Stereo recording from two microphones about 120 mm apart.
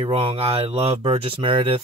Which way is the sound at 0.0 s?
50° right (ahead or behind).